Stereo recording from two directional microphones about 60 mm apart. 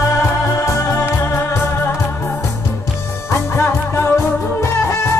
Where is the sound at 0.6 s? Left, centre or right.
Left.